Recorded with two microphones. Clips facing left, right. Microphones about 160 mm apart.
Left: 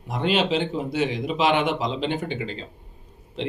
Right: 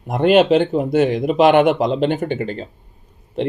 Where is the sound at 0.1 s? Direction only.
55° right (ahead or behind).